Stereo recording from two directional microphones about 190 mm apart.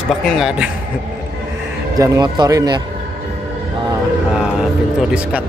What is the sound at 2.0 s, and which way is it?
Speech, 20° right (ahead or behind).